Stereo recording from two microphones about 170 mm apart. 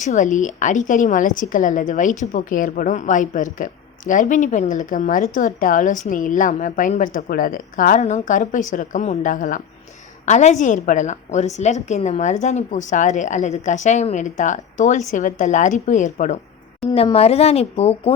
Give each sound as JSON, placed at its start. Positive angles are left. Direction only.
{"t": 0.0, "sound": "a woman's voice", "side_deg": 45}
{"t": 16.8, "sound": "speech", "side_deg": 35}